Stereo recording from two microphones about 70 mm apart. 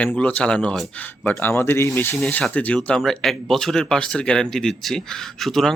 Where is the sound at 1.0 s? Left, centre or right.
Left.